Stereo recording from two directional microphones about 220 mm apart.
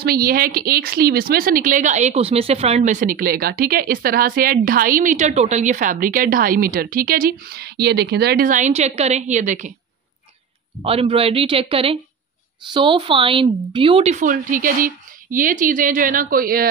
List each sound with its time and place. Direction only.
0.0 s speech: 45° right (ahead or behind)
10.8 s a woman's voice: 25° right (ahead or behind); by 16.6 s 40° right (ahead or behind)